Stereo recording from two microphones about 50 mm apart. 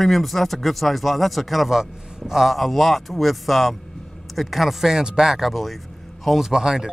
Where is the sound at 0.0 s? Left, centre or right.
Centre.